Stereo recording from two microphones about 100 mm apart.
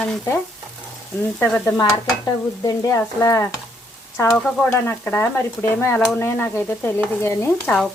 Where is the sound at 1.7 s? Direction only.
45° left (ahead or behind).